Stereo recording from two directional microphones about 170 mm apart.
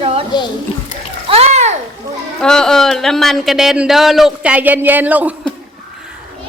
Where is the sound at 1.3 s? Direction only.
40° right (ahead or behind).